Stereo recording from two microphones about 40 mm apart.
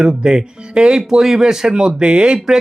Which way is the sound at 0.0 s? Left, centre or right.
Right.